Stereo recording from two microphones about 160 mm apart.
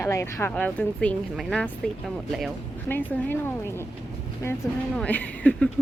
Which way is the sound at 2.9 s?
10° left (ahead or behind).